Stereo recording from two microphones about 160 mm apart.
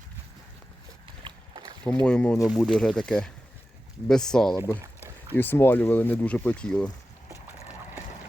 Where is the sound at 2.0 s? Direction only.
5° left (ahead or behind).